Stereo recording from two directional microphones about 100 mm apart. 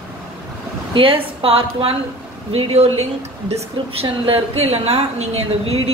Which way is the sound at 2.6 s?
85° right.